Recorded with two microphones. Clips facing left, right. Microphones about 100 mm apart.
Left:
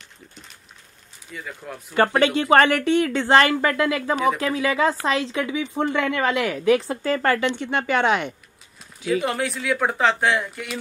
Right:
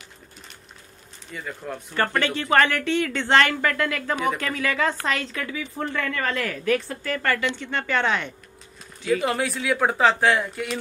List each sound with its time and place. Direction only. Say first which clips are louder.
1.3 s speech: right 2 dB; centre (ahead or behind)
2.0 s speech: left 6 dB; 15° left (ahead or behind)
4.2 s speech: left 4 dB; 5° left (ahead or behind)
6.8 s a woman's voice: left 6 dB; 30° left (ahead or behind); by 8.4 s 15° left (ahead or behind)
9.0 s speech: even; centre (ahead or behind)